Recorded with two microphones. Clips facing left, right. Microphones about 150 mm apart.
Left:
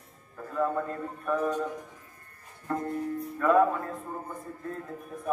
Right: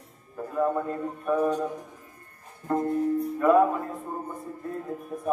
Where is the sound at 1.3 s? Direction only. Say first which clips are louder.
Right 4 dB; 15° right (ahead or behind).